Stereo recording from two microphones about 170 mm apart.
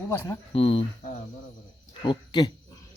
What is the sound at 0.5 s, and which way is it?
Speech, 35° left (ahead or behind).